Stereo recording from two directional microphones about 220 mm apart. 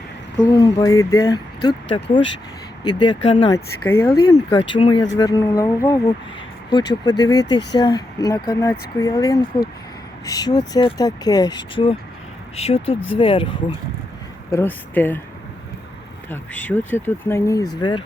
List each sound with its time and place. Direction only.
0.3 s speech: 15° left (ahead or behind)
2.8 s speech: 20° left (ahead or behind)
3.8 s speech: 10° left (ahead or behind)
4.3 s speech: 25° left (ahead or behind)
14.5 s speech: 10° left (ahead or behind)
16.3 s speech: 5° left (ahead or behind)